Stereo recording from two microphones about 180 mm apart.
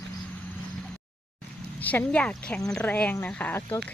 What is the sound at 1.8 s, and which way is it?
Speech, 10° left (ahead or behind).